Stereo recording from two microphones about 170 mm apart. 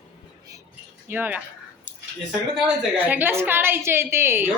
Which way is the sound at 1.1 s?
10° right (ahead or behind).